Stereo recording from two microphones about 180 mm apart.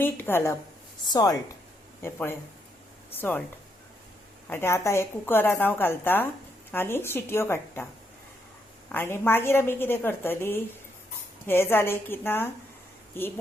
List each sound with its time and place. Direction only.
0.0 s a woman's voice: 10° left (ahead or behind)
4.4 s a woman's voice: 15° left (ahead or behind)
8.9 s a woman's voice: 10° left (ahead or behind)